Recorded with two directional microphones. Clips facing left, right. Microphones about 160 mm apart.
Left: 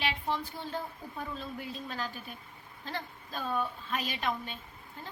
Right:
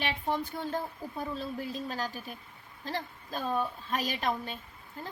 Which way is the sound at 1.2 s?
35° right (ahead or behind).